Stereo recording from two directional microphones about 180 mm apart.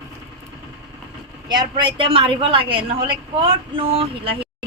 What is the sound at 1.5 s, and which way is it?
A woman's voice, 25° right (ahead or behind).